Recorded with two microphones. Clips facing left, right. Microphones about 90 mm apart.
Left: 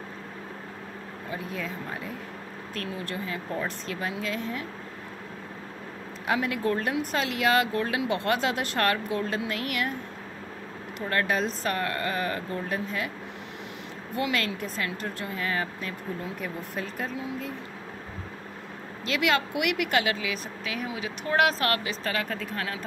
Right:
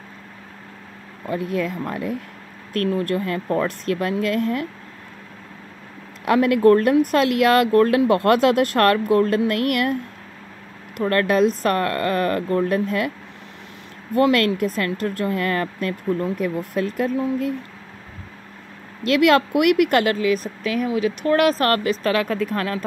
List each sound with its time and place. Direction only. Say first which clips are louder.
1.3 s speech: right 11 dB; 65° right (ahead or behind)
2.7 s speech: right 13 dB; 55° right (ahead or behind)
6.2 s speech: right 12 dB; 60° right (ahead or behind)
11.0 s speech: right 9 dB; 60° right (ahead or behind)
14.1 s speech: right 11 dB; 55° right (ahead or behind)
19.0 s speech: right 10 dB; 60° right (ahead or behind)